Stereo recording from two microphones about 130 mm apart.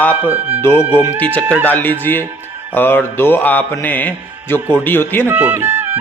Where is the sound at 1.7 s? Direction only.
15° left (ahead or behind).